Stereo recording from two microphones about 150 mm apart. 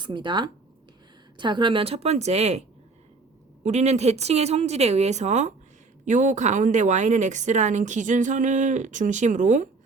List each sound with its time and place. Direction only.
0.0 s a woman's voice: 30° right (ahead or behind); by 9.6 s 55° right (ahead or behind)